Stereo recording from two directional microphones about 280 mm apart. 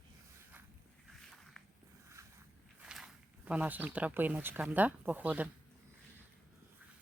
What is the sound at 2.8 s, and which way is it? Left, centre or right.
Speech, centre.